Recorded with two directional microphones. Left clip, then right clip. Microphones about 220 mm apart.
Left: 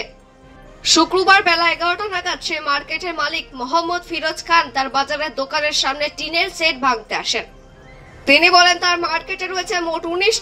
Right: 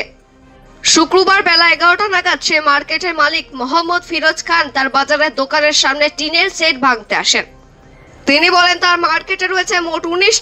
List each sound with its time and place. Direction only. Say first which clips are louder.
0.8 s a woman's voice: right 3 dB; 35° right (ahead or behind)